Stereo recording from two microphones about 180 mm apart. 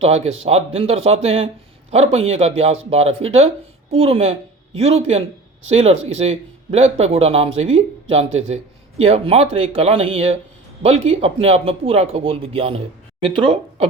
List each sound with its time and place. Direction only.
0.4 s a man's voice: 35° right (ahead or behind)
4.7 s speech: 90° right
5.7 s a man's voice: 35° right (ahead or behind)